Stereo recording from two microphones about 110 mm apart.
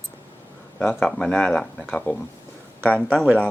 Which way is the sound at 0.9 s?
5° left (ahead or behind).